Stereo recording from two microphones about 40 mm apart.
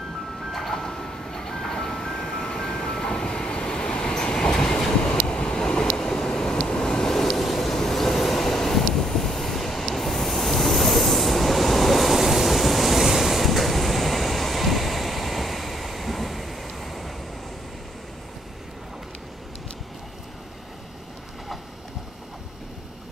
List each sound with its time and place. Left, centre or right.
0.5 s ice cream truck: centre
5.2 s waves: left
6.0 s vehicle: centre
6.7 s train: centre